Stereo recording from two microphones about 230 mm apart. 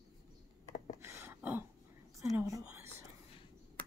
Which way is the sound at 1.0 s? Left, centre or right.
Centre.